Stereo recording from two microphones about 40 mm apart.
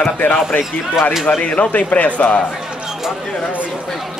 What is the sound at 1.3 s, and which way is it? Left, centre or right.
Speech, left.